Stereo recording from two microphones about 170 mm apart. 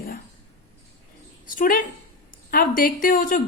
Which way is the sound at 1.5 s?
55° left (ahead or behind).